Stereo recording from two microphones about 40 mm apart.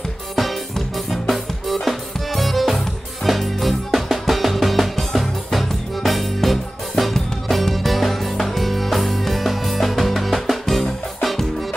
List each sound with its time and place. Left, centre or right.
0.7 s music: centre